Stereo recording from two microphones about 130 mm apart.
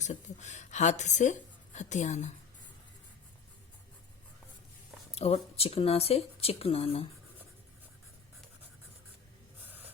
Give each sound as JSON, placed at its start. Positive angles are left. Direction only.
{"t": 0.0, "sound": "a woman's voice", "side_deg": 65}
{"t": 5.1, "sound": "speech", "side_deg": 50}